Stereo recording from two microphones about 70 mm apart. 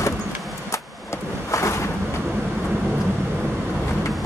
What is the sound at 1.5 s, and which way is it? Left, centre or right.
Vehicle, left.